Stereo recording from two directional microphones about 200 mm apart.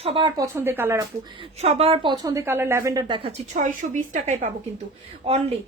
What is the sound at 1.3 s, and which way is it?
A woman's voice, 30° right (ahead or behind).